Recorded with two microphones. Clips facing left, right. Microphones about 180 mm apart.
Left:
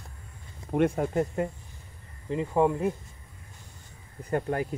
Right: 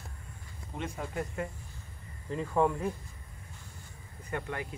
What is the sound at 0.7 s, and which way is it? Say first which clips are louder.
Speech: left 14 dB; 60° left (ahead or behind).